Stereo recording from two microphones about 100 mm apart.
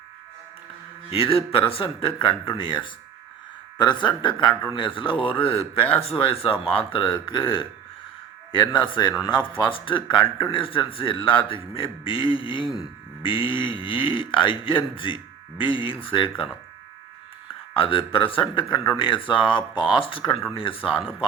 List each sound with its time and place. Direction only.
1.1 s a man's voice: 65° left (ahead or behind)
17.7 s a man's voice: 65° left (ahead or behind)